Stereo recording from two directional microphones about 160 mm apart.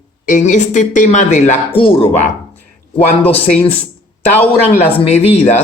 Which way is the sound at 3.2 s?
35° left (ahead or behind).